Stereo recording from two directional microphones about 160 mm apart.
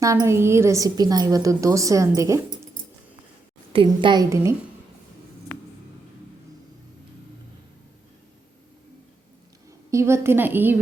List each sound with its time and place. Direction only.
0.0 s a woman's voice: 20° right (ahead or behind)
3.7 s a woman's voice: 30° right (ahead or behind)
9.6 s a woman's voice: 20° right (ahead or behind)